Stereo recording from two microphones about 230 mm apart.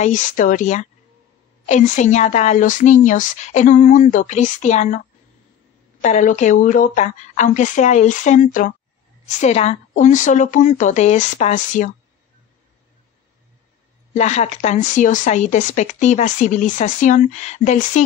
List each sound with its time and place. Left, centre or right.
0.0 s speech: left
14.1 s speech: left